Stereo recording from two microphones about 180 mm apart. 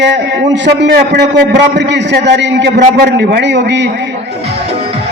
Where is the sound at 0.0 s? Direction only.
80° right.